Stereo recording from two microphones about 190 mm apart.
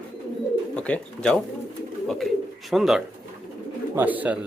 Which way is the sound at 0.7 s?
5° left (ahead or behind).